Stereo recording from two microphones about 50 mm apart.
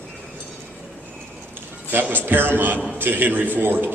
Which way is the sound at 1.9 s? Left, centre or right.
Right.